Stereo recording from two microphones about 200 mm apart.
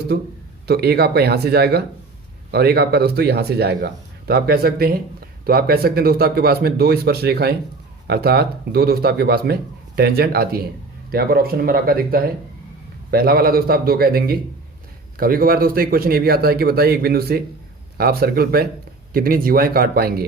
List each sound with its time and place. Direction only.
0.1 s speech: 55° right (ahead or behind)